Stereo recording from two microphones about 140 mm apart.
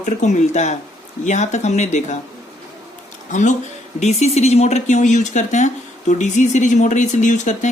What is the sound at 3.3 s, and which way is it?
Speech, 60° left (ahead or behind).